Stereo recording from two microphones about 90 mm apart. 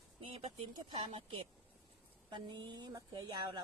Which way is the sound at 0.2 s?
75° right (ahead or behind).